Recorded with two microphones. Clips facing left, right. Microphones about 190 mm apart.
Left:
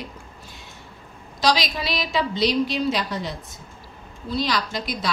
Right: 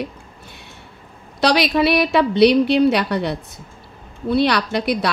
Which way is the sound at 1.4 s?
60° right (ahead or behind).